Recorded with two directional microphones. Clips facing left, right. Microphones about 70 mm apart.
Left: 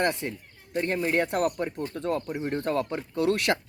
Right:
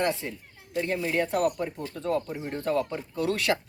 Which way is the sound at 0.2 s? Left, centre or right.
Left.